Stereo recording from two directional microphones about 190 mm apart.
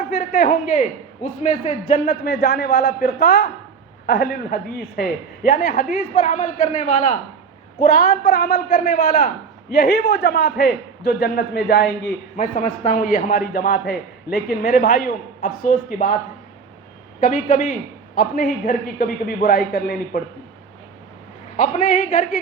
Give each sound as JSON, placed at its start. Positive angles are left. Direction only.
{"t": 0.2, "sound": "a man's voice", "side_deg": 45}
{"t": 1.9, "sound": "a man's voice", "side_deg": 50}
{"t": 7.8, "sound": "a man's voice", "side_deg": 50}
{"t": 17.2, "sound": "a man's voice", "side_deg": 45}
{"t": 21.5, "sound": "a man's voice", "side_deg": 40}